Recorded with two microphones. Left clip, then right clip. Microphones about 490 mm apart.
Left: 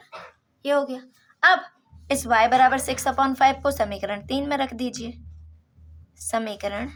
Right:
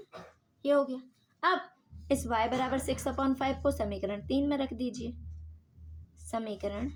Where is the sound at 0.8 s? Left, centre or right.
Centre.